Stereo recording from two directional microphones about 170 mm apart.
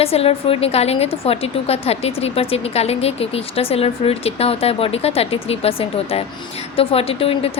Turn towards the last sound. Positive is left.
turn(degrees=35)  # may be behind; listen again after turning